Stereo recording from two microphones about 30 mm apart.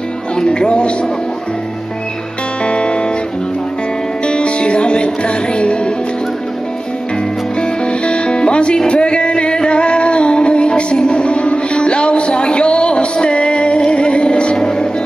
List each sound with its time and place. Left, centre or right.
0.5 s speech: left
2.6 s music: left
4.2 s music: left
7.6 s music: left
14.6 s music: left